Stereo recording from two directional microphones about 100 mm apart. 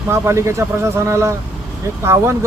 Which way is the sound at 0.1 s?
30° right (ahead or behind).